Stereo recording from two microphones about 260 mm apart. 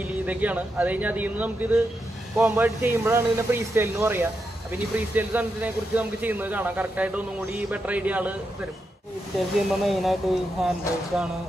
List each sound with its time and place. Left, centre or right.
0.0 s speech: centre
9.7 s speech: centre